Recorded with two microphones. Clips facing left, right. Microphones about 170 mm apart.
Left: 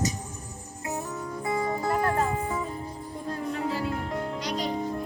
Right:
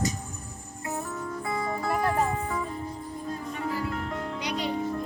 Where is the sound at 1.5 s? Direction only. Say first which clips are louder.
Left 4 dB; 20° left (ahead or behind).